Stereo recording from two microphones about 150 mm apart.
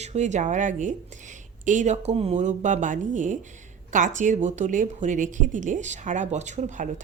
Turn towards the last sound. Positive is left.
turn(degrees=-55)  # may be behind; listen again after turning